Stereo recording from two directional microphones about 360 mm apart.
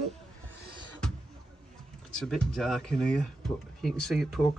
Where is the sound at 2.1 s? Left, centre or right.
Centre.